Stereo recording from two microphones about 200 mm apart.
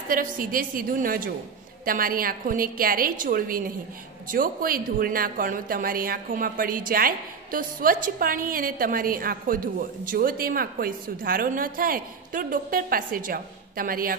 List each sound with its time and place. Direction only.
0.1 s speech: 45° right (ahead or behind)